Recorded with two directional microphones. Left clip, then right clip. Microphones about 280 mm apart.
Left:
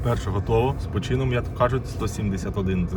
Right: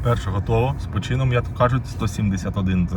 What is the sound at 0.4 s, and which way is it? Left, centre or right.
Speech, right.